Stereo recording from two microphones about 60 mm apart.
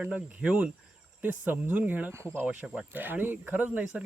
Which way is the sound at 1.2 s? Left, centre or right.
Right.